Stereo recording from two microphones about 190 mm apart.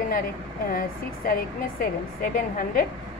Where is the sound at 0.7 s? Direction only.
50° left (ahead or behind).